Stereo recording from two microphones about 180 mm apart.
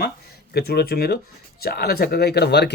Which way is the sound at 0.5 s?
60° left (ahead or behind).